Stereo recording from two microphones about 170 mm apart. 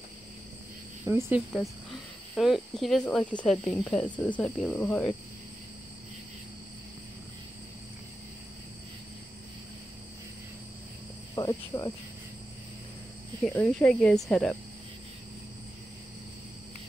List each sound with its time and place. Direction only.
1.0 s speech: 10° right (ahead or behind); by 5.1 s 10° left (ahead or behind)
11.3 s cricket: 20° left (ahead or behind)
13.4 s speech: 5° left (ahead or behind)